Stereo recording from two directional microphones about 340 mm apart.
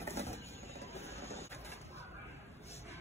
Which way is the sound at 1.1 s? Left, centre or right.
Centre.